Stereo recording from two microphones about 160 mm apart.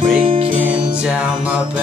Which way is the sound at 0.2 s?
35° right (ahead or behind).